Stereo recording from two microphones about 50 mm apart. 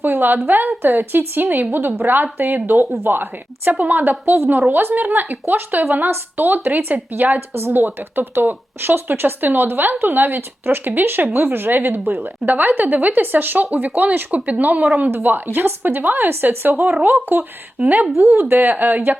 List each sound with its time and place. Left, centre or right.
0.0 s a woman's voice: right
14.3 s a woman's voice: right
16.3 s a woman's voice: right
17.7 s a woman's voice: right